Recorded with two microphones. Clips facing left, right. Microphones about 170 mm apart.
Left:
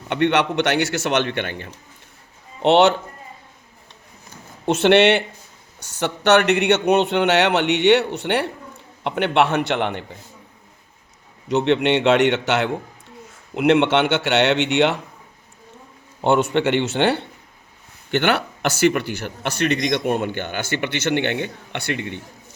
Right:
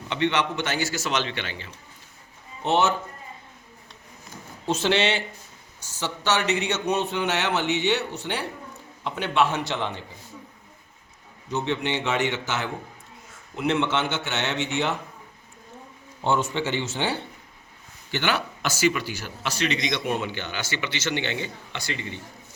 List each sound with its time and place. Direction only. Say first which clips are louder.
0.1 s speech: left 6 dB; 60° left (ahead or behind)
2.6 s speech: left 8 dB; 75° left (ahead or behind)
4.6 s speech: left 9 dB; 65° left (ahead or behind)
11.4 s speech: left 9 dB; 70° left (ahead or behind)
16.2 s speech: left 7 dB; 65° left (ahead or behind)
18.1 s speech: left 7 dB; 60° left (ahead or behind)